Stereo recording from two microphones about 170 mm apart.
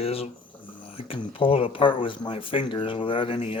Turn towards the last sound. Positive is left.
turn(degrees=35)  # may be behind; listen again after turning